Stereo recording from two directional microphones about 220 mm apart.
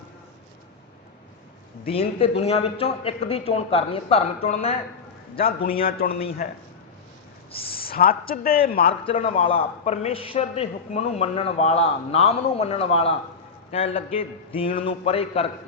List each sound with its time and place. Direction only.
1.9 s a man's voice: 25° left (ahead or behind)
5.4 s speech: 40° left (ahead or behind)
7.8 s speech: 40° left (ahead or behind)
9.1 s a man's voice: 30° left (ahead or behind)